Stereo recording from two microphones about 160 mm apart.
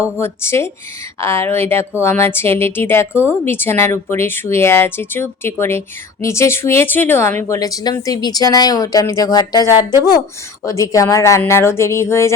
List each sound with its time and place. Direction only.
0.0 s speech: 15° left (ahead or behind)